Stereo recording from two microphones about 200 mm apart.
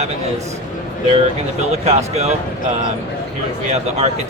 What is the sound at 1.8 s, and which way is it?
Speech, 30° right (ahead or behind).